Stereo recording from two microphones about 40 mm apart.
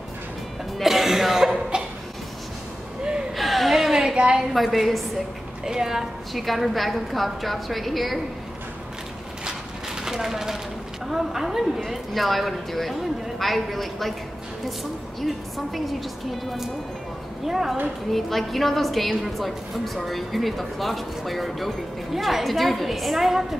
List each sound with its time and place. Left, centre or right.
0.7 s music: centre
3.3 s a sound: centre
3.9 s a sound: centre
4.6 s a woman's voice: centre
5.7 s a woman's voice: centre
10.0 s a woman's voice: centre
11.8 s a woman's voice: centre
15.1 s a woman's voice: centre
17.5 s a woman's voice: centre
18.1 s a woman's voice: centre